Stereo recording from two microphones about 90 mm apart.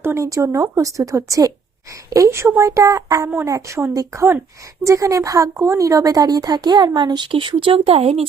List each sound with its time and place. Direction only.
0.0 s a woman's voice: 30° right (ahead or behind); by 8.3 s 90° right